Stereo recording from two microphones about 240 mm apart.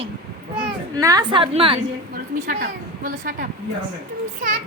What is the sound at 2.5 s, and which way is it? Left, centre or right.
Speech, right.